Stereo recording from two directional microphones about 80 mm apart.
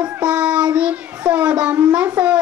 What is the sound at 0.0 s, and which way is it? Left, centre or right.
Child singing, centre.